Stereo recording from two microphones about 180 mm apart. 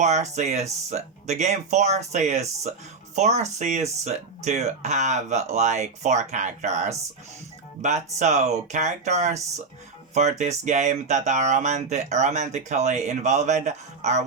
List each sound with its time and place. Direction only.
0.0 s speech: 40° right (ahead or behind)